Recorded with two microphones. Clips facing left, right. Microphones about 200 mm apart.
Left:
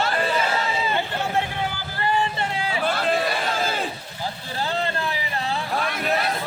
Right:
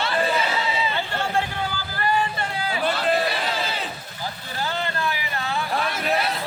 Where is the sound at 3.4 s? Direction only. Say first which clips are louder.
Left 2 dB; 45° left (ahead or behind).